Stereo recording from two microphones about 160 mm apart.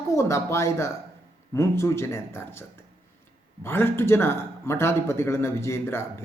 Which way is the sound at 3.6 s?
15° left (ahead or behind).